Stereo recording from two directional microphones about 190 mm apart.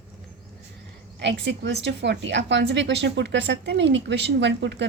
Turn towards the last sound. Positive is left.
turn(degrees=-65)  # may be behind; listen again after turning